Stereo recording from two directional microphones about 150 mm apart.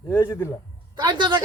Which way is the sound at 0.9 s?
30° right (ahead or behind).